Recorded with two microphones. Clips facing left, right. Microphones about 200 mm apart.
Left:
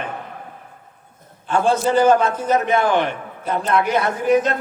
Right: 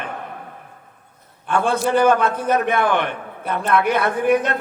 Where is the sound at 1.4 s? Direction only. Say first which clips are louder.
Left 2 dB; 60° right (ahead or behind).